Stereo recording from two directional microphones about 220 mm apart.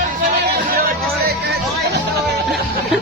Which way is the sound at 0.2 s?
40° right (ahead or behind).